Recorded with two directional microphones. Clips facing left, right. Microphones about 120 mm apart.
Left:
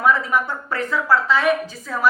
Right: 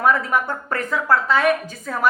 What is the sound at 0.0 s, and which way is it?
A woman's voice, 45° right (ahead or behind).